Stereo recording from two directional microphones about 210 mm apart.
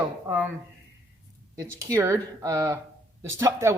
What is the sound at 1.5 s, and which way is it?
Speech, 10° right (ahead or behind).